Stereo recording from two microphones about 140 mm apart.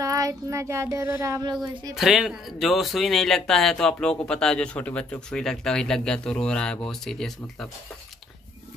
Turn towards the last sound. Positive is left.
turn(degrees=5)  # may be behind; listen again after turning